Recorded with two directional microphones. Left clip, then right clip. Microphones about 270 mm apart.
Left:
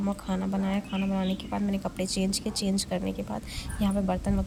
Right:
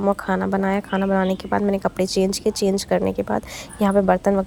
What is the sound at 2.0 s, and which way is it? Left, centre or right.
Speech, centre.